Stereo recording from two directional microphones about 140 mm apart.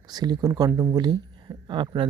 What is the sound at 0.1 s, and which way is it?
Speech, 30° right (ahead or behind).